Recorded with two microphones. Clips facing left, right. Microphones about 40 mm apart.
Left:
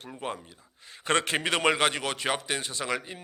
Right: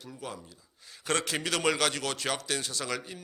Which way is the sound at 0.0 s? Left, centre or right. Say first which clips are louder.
Left 5 dB; left.